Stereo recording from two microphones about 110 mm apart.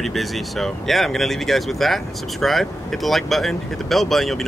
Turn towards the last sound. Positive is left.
turn(degrees=0)  # may be behind; listen again after turning